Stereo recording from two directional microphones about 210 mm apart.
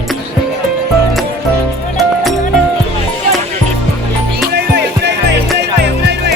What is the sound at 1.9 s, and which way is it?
Music, centre (ahead or behind).